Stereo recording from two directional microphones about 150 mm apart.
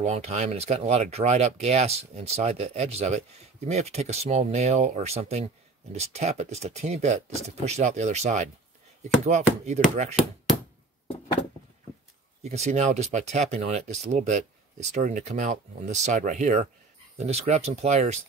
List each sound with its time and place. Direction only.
0.0 s speech: 45° right (ahead or behind)
12.4 s speech: 50° right (ahead or behind)